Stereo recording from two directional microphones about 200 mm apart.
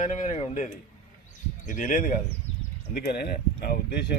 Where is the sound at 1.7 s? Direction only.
40° left (ahead or behind).